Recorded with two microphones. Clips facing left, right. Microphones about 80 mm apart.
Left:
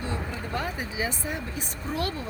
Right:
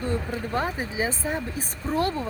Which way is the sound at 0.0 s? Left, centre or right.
Right.